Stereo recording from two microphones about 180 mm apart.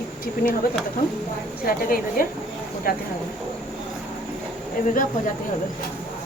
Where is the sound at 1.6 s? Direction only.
55° left (ahead or behind).